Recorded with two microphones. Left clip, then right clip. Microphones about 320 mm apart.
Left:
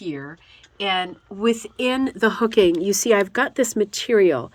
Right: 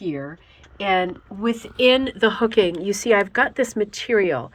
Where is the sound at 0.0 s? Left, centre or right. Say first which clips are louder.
Right 2 dB; centre.